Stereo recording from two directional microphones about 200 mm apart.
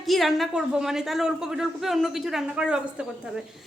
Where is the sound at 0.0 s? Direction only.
Centre (ahead or behind).